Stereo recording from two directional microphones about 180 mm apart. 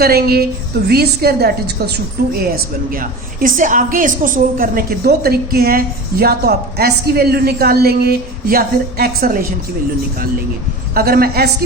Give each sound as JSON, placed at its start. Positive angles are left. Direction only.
{"t": 0.0, "sound": "a woman's voice", "side_deg": -60}
{"t": 2.9, "sound": "a woman's voice", "side_deg": -50}
{"t": 10.9, "sound": "a woman's voice", "side_deg": -55}